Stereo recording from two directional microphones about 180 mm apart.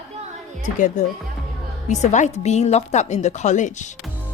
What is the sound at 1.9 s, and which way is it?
Speech, 40° left (ahead or behind).